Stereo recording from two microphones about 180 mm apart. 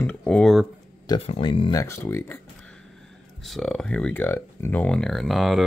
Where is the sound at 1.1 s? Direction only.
25° left (ahead or behind).